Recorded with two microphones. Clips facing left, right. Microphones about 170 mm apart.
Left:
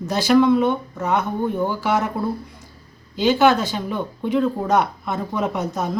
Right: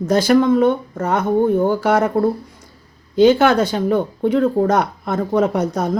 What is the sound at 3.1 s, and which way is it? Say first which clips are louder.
Speech: right 4 dB; 50° right (ahead or behind).